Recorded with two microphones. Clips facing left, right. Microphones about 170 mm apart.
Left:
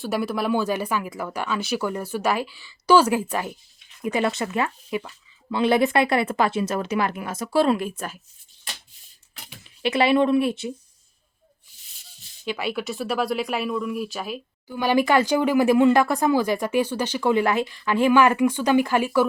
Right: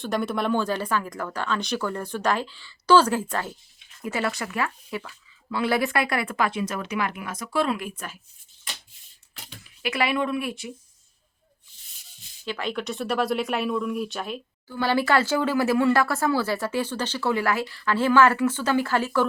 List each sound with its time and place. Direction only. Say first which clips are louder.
0.0 s speech: left 1 dB; 5° left (ahead or behind); by 8.1 s 30° left (ahead or behind)
9.6 s speech: left 6 dB; 25° left (ahead or behind)
12.5 s speech: left 2 dB; 10° left (ahead or behind)